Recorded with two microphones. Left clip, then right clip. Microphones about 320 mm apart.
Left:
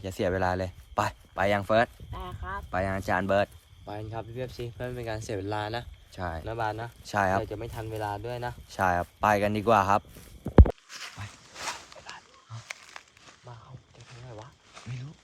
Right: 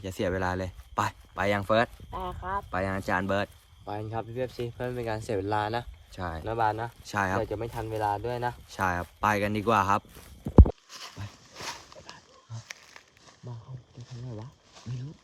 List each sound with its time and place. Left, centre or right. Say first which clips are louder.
0.0 s speech: left 2 dB; centre
2.1 s speech: right 8 dB; centre
2.6 s speech: left 5 dB; centre
3.8 s speech: right 3 dB; centre
6.1 s speech: left 1 dB; centre
6.4 s speech: right 6 dB; centre
7.0 s speech: left 3 dB; centre
7.4 s speech: right 3 dB; centre
8.7 s speech: left 6 dB; centre
12.6 s a sound: left 4 dB; centre